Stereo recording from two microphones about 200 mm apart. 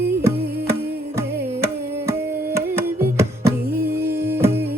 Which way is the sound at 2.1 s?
15° right (ahead or behind).